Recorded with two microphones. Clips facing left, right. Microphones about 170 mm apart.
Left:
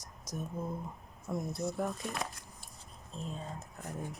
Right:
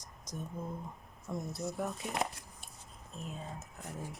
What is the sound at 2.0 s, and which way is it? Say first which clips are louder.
Speech: right 2 dB; 20° right (ahead or behind).